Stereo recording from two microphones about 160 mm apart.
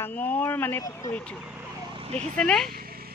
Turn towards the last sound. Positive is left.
turn(degrees=-70)  # may be behind; listen again after turning